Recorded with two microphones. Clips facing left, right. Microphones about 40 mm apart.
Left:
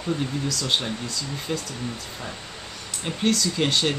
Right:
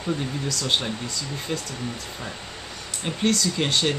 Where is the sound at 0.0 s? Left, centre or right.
Centre.